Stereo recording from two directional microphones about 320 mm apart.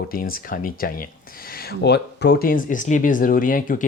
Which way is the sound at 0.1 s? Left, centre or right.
Left.